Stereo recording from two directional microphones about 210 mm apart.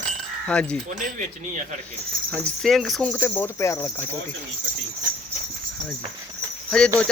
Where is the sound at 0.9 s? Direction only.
35° right (ahead or behind).